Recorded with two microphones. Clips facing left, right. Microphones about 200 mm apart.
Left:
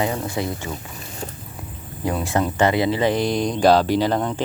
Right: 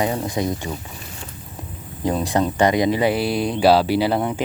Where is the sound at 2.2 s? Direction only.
15° right (ahead or behind).